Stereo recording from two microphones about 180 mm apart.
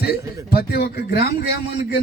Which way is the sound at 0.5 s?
60° left (ahead or behind).